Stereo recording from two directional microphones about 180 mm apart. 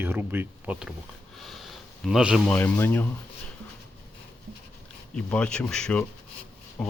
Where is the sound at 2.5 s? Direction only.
10° left (ahead or behind).